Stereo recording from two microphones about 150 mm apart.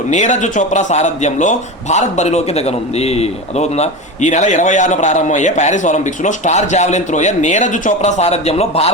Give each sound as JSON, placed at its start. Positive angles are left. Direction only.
{"t": 0.1, "sound": "a man's voice", "side_deg": 55}